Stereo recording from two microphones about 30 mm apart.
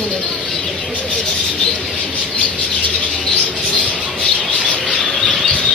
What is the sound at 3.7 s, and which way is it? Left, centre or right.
Bird, left.